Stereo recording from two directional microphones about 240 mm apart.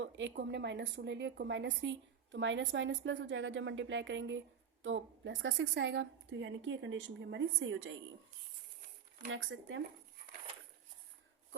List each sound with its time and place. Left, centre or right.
0.0 s a woman's voice: right
9.3 s a woman's voice: right